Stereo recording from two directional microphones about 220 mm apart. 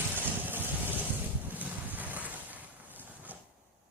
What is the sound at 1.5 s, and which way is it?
Boat, 5° right (ahead or behind).